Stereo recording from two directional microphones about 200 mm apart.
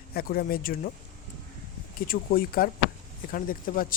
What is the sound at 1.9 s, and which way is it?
Speech, 45° left (ahead or behind).